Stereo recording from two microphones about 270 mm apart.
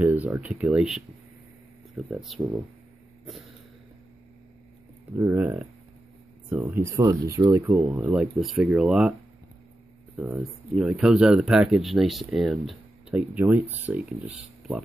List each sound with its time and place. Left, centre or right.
0.0 s speech: centre
5.1 s speech: centre
10.1 s speech: centre